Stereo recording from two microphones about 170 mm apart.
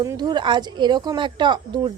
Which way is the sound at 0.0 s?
20° right (ahead or behind).